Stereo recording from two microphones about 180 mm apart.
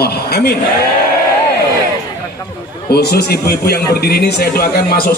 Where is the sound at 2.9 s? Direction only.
60° left (ahead or behind).